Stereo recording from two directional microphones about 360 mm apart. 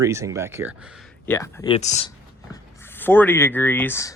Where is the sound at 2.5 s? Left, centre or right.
Centre.